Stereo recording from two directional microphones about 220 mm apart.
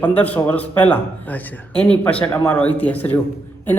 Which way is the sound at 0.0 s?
5° left (ahead or behind).